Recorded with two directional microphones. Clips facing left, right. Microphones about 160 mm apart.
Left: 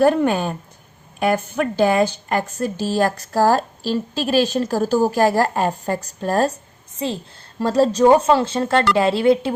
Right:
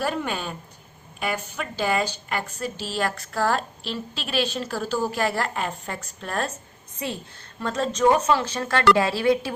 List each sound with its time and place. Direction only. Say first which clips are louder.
0.0 s speech: left 11 dB; 45° left (ahead or behind)
7.0 s speech: left 6 dB; 25° left (ahead or behind)